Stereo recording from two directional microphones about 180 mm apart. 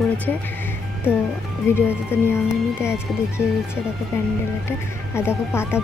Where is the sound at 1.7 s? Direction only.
15° left (ahead or behind).